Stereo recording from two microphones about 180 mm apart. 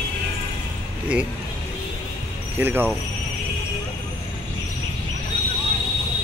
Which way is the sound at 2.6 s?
10° right (ahead or behind).